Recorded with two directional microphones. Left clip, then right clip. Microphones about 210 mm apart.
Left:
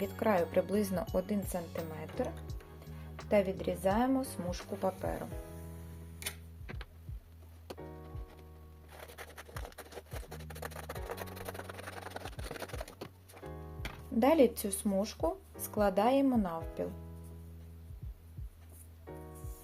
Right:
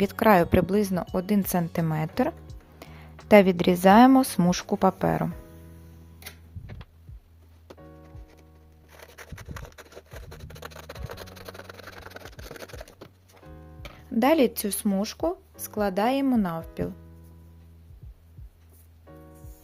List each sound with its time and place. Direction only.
0.0 s a woman's voice: 45° right (ahead or behind)
0.7 s speech: 30° right (ahead or behind)
1.1 s a woman's voice: 40° right (ahead or behind)
3.2 s a woman's voice: 50° right (ahead or behind)
10.2 s a sound: 5° right (ahead or behind)
10.5 s music: 15° right (ahead or behind); by 12.9 s centre (ahead or behind)
14.2 s speech: 35° right (ahead or behind)